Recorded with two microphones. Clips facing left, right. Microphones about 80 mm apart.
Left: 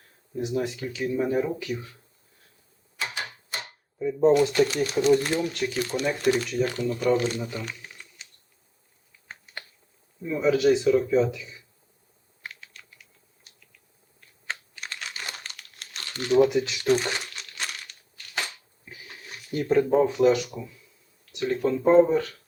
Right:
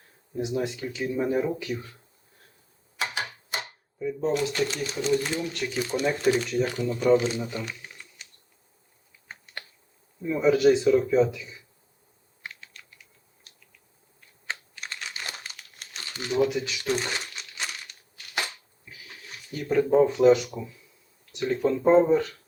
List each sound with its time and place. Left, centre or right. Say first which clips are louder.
0.3 s speech: left 1 dB; centre
3.0 s typewriter: right 2 dB; centre
4.3 s speech: left 7 dB; centre
10.2 s speech: right 1 dB; centre
12.4 s typing: even; centre
19.0 s a sound: left 1 dB; centre
19.9 s speech: right 5 dB; centre